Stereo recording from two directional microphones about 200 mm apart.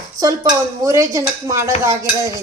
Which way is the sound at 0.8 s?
15° right (ahead or behind).